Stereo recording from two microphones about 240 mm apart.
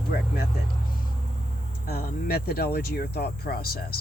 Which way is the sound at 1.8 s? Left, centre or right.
Left.